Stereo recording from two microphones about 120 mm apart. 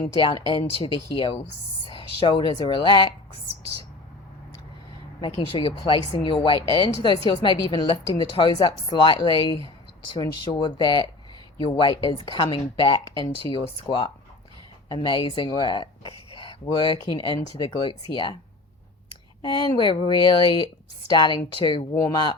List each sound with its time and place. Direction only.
0.8 s a woman's voice: 45° left (ahead or behind)
5.2 s a woman's voice: 45° left (ahead or behind)
19.5 s a woman's voice: 40° left (ahead or behind)